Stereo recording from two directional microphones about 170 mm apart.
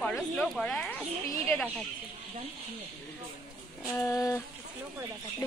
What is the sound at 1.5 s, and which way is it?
Speech, 5° left (ahead or behind).